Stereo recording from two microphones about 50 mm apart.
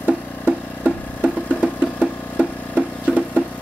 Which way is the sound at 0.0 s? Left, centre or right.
Right.